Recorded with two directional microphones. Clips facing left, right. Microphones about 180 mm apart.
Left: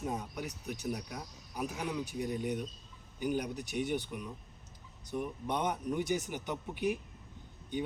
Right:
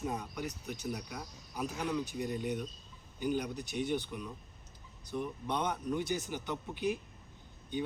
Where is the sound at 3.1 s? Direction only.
15° left (ahead or behind).